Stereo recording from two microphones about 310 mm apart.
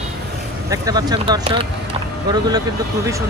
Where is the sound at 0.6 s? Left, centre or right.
Centre.